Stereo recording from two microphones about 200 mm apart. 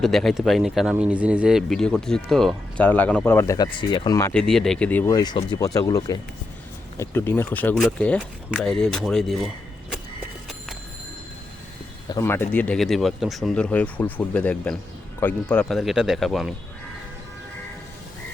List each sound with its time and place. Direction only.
0.0 s speech: centre (ahead or behind)
4.4 s speech: centre (ahead or behind)
12.0 s speech: 15° left (ahead or behind); by 16.5 s centre (ahead or behind)